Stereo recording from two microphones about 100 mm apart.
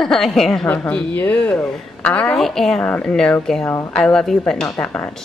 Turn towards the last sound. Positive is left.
turn(degrees=10)  # may be behind; listen again after turning